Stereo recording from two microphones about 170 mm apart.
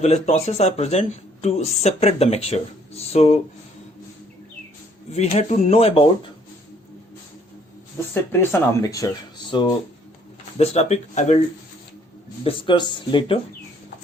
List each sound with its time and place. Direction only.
0.0 s speech: 40° left (ahead or behind)
5.1 s speech: 40° left (ahead or behind)
8.1 s speech: 15° left (ahead or behind)
10.6 s speech: 40° left (ahead or behind)
12.5 s speech: 30° left (ahead or behind)